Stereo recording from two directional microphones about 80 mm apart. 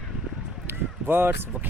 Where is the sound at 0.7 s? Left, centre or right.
Right.